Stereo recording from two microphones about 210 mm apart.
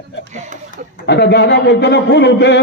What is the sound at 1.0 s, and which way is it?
A man's voice, 55° left (ahead or behind).